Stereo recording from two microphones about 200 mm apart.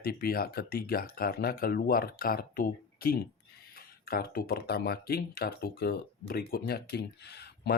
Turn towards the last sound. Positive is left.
turn(degrees=55)  # may be behind; listen again after turning